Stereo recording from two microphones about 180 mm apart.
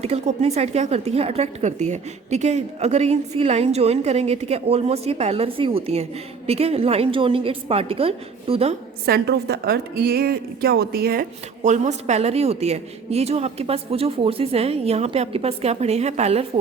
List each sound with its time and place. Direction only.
0.0 s a woman's voice: 35° right (ahead or behind)
9.0 s a woman's voice: 65° right (ahead or behind)
11.6 s a woman's voice: 40° right (ahead or behind)